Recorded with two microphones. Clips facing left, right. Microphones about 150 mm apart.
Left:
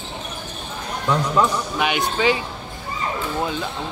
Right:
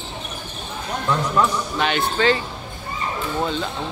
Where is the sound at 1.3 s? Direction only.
10° left (ahead or behind).